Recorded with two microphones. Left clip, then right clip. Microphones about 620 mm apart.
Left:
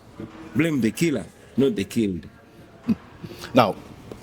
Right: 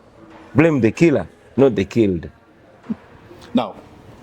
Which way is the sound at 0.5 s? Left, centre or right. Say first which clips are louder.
Right 8 dB; right.